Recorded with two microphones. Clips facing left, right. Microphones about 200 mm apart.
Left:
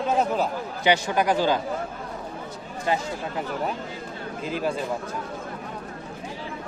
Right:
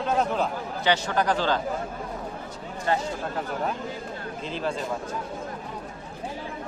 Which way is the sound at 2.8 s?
10° left (ahead or behind).